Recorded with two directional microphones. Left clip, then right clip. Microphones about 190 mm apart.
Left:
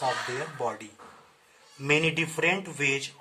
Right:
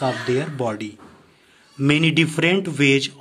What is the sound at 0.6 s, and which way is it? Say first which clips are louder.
Speech: right 7 dB; 25° right (ahead or behind).